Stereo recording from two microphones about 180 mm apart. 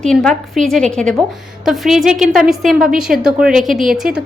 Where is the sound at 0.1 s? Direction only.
5° left (ahead or behind).